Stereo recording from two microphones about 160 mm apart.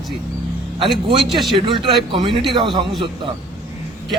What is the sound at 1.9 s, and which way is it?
Speech, 30° right (ahead or behind).